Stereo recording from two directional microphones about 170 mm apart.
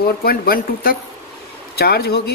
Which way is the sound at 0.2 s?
60° left (ahead or behind).